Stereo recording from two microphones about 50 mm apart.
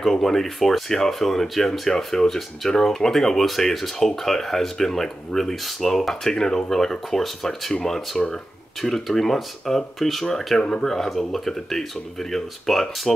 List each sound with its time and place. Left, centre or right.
0.0 s speech: centre